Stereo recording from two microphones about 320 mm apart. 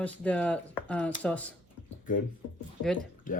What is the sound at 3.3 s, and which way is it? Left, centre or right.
Speech, left.